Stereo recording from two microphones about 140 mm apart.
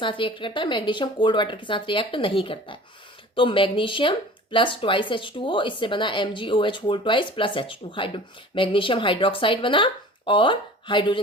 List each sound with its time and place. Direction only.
0.0 s a woman's voice: 35° left (ahead or behind)